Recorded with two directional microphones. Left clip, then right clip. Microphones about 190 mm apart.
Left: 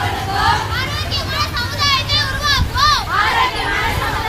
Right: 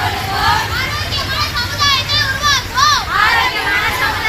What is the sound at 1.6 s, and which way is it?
Children playing, 15° left (ahead or behind).